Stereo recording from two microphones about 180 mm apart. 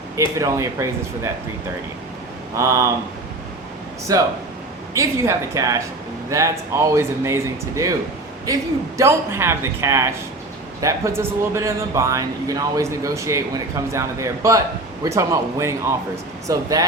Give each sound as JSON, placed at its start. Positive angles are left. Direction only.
{"t": 0.3, "sound": "speech", "side_deg": -15}
{"t": 2.6, "sound": "speech", "side_deg": -15}
{"t": 4.1, "sound": "speech", "side_deg": -20}